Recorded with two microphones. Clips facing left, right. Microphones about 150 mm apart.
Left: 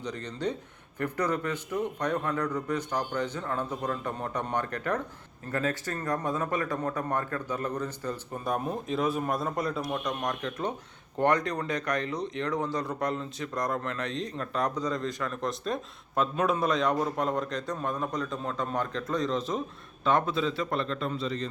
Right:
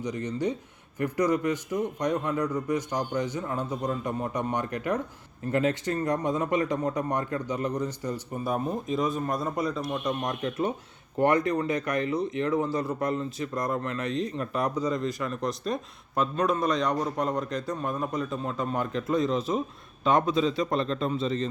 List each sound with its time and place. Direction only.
0.0 s a man's voice: 10° right (ahead or behind)
8.6 s a man's voice: 5° left (ahead or behind); by 21.4 s 25° right (ahead or behind)